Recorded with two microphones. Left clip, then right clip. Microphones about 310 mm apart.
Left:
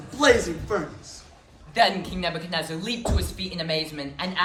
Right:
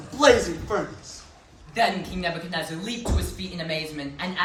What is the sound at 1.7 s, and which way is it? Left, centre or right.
Speech, centre.